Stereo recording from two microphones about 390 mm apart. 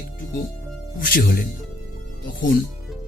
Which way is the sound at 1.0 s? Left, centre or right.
Left.